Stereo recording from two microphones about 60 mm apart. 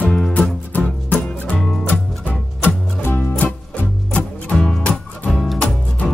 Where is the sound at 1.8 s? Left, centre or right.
Left.